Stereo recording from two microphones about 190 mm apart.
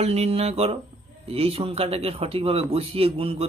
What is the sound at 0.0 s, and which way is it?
A man's voice, 35° right (ahead or behind).